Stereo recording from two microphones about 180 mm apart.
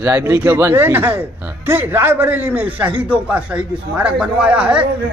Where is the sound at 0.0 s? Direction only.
15° right (ahead or behind).